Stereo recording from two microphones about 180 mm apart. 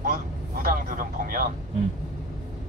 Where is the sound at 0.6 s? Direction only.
50° right (ahead or behind).